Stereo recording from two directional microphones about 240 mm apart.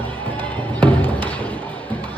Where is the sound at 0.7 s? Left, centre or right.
Centre.